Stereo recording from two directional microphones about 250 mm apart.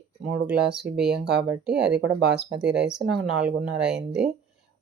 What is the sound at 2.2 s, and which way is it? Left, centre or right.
Speech, right.